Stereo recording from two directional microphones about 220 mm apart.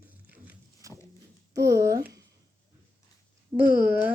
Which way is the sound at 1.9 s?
45° right (ahead or behind).